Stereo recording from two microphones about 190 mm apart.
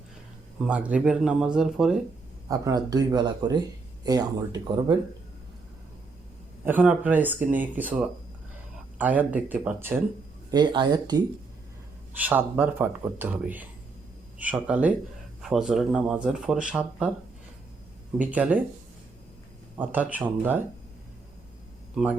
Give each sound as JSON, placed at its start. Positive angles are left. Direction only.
{"t": 0.6, "sound": "speech", "side_deg": -5}
{"t": 2.5, "sound": "speech", "side_deg": -20}
{"t": 6.7, "sound": "speech", "side_deg": -10}
{"t": 10.5, "sound": "speech", "side_deg": -25}
{"t": 12.1, "sound": "speech", "side_deg": -10}
{"t": 18.2, "sound": "speech", "side_deg": -10}
{"t": 19.7, "sound": "speech", "side_deg": -10}